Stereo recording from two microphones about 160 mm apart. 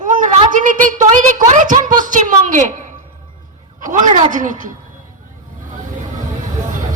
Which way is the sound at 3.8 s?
55° right (ahead or behind).